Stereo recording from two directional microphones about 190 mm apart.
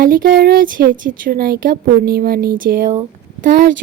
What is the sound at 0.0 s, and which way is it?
Speech, 50° right (ahead or behind).